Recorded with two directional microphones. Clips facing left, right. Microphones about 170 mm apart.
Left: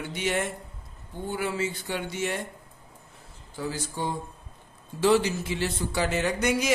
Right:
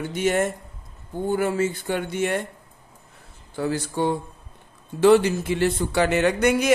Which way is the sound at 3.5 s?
60° right (ahead or behind).